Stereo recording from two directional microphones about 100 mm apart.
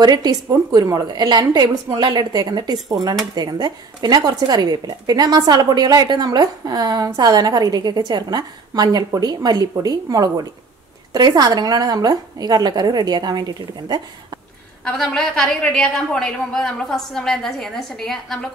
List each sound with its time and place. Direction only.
0.0 s speech: 40° right (ahead or behind)
14.9 s a woman's voice: 5° left (ahead or behind)